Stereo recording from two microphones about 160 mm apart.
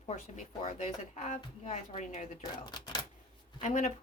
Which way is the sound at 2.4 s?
30° left (ahead or behind).